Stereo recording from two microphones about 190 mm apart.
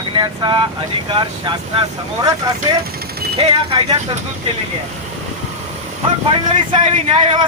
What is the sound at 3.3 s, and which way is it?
Speech, 30° right (ahead or behind).